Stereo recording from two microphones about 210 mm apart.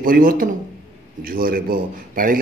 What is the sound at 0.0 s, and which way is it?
Speech, 40° right (ahead or behind).